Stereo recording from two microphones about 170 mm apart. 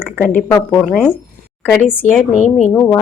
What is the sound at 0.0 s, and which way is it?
A woman's voice, 10° left (ahead or behind).